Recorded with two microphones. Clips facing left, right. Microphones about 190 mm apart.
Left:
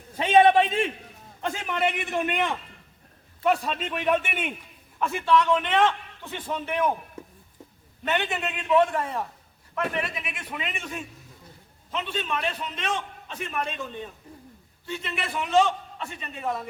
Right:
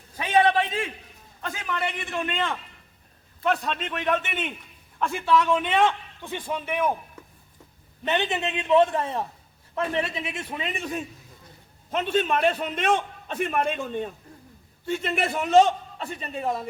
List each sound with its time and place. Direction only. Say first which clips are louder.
0.2 s a sound: left 3 dB; 25° left (ahead or behind)
1.4 s a man's voice: left 3 dB; 25° left (ahead or behind); by 6.9 s 10° right (ahead or behind)
8.0 s a man's voice: right 2 dB; 20° right (ahead or behind); by 11.0 s 35° right (ahead or behind)
11.9 s a man's voice: right 7 dB; 50° right (ahead or behind); by 16.6 s 35° right (ahead or behind)